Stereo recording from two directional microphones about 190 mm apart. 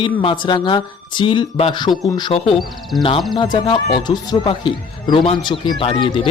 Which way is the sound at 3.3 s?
25° left (ahead or behind).